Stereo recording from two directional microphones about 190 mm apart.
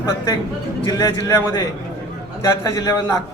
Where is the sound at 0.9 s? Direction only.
15° left (ahead or behind).